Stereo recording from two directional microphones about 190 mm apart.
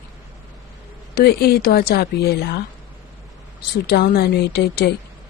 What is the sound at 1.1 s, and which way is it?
A woman's voice, 55° left (ahead or behind).